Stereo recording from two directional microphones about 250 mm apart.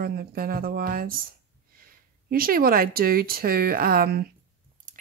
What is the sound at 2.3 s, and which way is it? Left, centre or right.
Speech, right.